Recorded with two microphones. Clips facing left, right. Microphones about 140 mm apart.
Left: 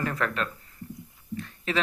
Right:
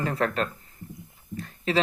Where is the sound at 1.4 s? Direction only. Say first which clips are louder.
Right 4 dB; 35° right (ahead or behind).